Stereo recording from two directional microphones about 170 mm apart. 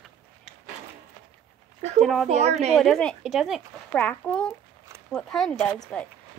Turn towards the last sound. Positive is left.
turn(degrees=5)  # may be behind; listen again after turning